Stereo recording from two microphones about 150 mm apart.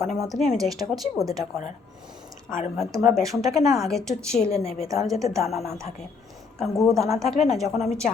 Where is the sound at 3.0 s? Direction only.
Centre (ahead or behind).